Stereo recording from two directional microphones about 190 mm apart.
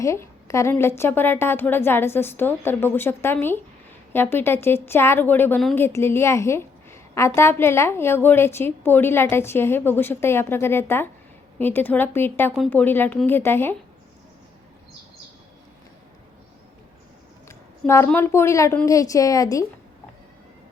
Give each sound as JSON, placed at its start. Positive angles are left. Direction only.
{"t": 0.0, "sound": "a woman's voice", "side_deg": 15}
{"t": 17.5, "sound": "a woman's voice", "side_deg": 15}